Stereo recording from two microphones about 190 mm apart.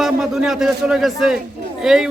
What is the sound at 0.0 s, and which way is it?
A man's voice, centre (ahead or behind).